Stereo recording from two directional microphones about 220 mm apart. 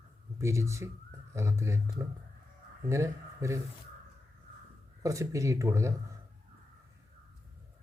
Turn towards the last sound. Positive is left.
turn(degrees=-15)  # may be behind; listen again after turning